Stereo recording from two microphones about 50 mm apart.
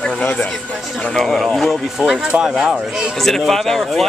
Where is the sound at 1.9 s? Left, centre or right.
Centre.